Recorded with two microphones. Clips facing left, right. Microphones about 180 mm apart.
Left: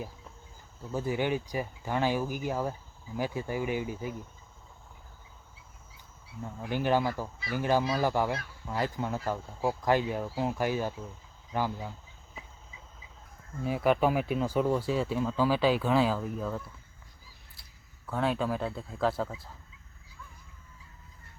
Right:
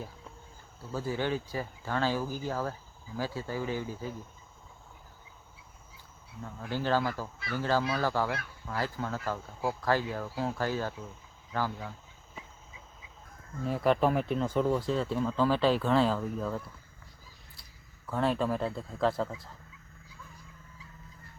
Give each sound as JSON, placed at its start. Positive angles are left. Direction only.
{"t": 0.9, "sound": "speech", "side_deg": 15}
{"t": 6.4, "sound": "speech", "side_deg": 15}
{"t": 13.7, "sound": "speech", "side_deg": 5}
{"t": 17.6, "sound": "speech", "side_deg": 0}